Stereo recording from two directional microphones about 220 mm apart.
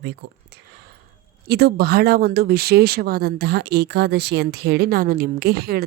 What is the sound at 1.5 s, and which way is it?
Speech, 45° right (ahead or behind).